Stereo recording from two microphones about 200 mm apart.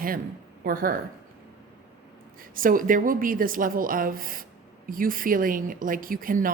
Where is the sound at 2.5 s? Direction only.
45° right (ahead or behind).